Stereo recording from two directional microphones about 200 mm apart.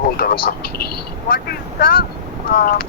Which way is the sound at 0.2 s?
50° left (ahead or behind).